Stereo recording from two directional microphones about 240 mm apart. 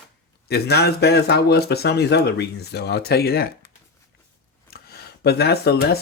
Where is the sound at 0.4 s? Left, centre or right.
Left.